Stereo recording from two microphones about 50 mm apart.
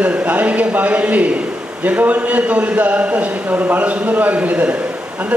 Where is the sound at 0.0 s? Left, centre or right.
Right.